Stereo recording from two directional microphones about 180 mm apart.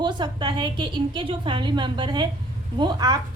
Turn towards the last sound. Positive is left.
turn(degrees=-25)  # may be behind; listen again after turning